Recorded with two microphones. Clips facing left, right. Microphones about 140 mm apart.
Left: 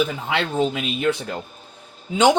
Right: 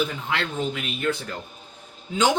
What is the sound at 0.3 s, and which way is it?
Speech, 90° left.